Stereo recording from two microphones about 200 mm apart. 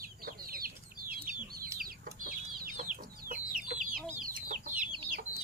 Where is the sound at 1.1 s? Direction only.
45° right (ahead or behind).